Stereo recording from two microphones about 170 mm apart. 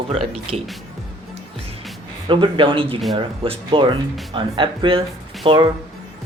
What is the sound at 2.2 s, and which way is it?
Speech, 30° right (ahead or behind).